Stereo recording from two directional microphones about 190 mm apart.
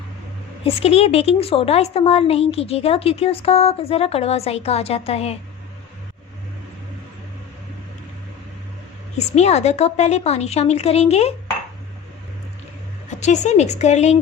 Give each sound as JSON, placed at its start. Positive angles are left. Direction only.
{"t": 0.6, "sound": "a woman's voice", "side_deg": 30}
{"t": 9.1, "sound": "a woman's voice", "side_deg": 35}
{"t": 13.1, "sound": "a woman's voice", "side_deg": 35}